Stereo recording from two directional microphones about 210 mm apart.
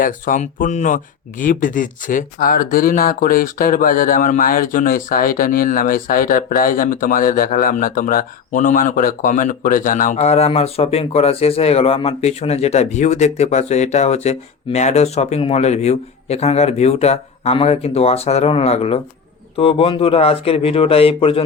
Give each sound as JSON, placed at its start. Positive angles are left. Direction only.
{"t": 0.0, "sound": "speech", "side_deg": 40}